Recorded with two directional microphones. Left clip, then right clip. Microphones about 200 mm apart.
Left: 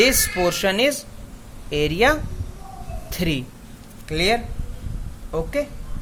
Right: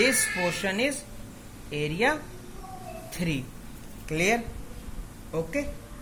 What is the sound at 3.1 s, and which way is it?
Speech, 50° left (ahead or behind).